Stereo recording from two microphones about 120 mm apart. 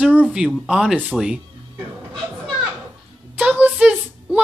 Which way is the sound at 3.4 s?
10° right (ahead or behind).